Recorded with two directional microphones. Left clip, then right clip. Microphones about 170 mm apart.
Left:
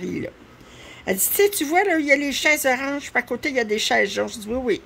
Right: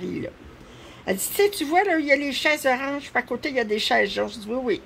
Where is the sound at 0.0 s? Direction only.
25° left (ahead or behind).